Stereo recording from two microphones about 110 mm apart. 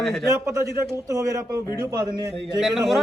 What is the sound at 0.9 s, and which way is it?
A man's voice, 30° right (ahead or behind).